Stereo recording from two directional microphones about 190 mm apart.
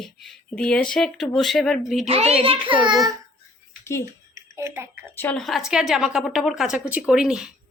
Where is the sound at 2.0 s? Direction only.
30° right (ahead or behind).